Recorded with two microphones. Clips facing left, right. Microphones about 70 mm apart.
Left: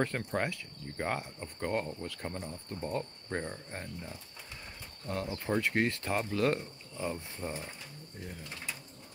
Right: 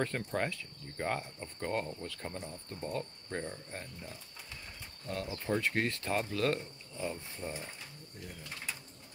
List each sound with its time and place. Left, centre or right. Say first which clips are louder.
0.0 s speech: left 2 dB; left
2.0 s cricket: left 2 dB; left
2.9 s speech: left 2 dB; left